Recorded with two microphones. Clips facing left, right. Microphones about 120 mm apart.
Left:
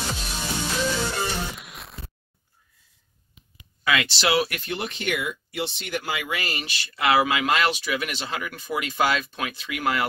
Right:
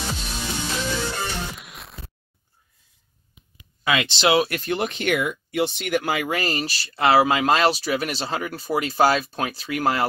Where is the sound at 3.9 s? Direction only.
25° right (ahead or behind).